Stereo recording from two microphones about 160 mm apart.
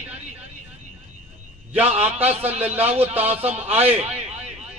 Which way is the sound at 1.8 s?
40° right (ahead or behind).